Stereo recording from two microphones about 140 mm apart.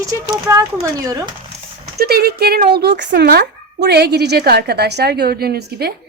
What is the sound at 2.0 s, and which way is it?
Speech, 90° right.